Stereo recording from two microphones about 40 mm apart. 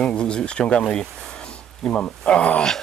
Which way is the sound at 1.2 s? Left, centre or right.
Left.